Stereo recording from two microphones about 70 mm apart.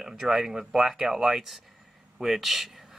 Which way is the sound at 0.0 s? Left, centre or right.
Centre.